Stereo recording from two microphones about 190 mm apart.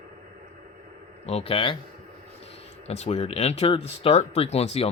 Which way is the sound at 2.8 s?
35° left (ahead or behind).